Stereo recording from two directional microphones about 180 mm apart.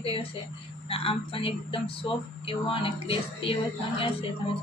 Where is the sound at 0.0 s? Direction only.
30° left (ahead or behind).